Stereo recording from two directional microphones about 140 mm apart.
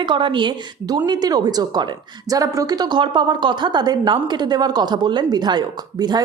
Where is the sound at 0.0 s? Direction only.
35° right (ahead or behind).